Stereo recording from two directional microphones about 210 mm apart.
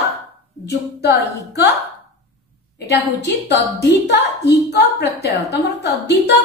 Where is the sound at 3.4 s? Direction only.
55° left (ahead or behind).